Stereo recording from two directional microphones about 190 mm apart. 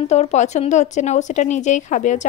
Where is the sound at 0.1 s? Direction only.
35° left (ahead or behind).